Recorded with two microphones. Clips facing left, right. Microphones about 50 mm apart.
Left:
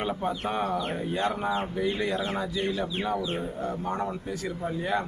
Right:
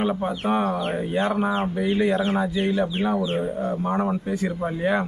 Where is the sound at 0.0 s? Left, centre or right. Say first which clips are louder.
Right 5 dB; centre.